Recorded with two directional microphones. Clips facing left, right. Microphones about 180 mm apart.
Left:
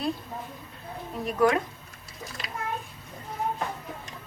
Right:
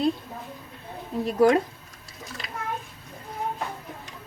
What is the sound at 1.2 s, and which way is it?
Speech, 30° right (ahead or behind).